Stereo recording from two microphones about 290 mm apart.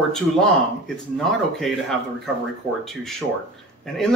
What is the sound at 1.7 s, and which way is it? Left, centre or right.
Speech, centre.